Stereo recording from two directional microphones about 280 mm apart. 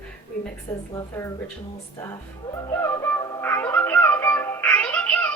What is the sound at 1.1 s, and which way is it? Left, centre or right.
Speech, centre.